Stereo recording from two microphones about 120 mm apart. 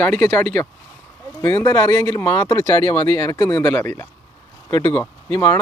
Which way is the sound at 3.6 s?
20° left (ahead or behind).